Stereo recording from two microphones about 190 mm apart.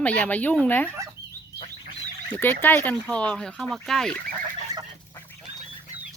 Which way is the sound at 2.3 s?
10° left (ahead or behind).